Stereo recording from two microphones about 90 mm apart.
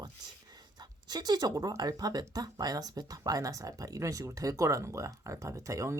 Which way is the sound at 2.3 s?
45° right (ahead or behind).